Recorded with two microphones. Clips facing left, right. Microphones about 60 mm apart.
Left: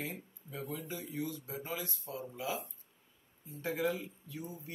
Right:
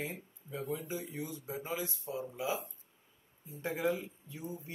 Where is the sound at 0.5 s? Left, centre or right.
Centre.